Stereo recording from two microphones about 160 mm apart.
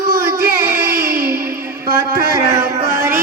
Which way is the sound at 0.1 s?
65° right (ahead or behind).